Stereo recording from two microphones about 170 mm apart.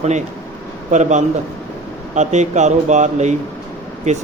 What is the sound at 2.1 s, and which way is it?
Speech, 45° right (ahead or behind).